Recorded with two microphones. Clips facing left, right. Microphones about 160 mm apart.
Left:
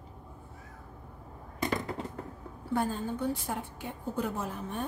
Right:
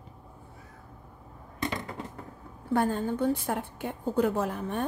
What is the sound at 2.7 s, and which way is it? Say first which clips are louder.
A woman's voice: right 4 dB; 60° right (ahead or behind).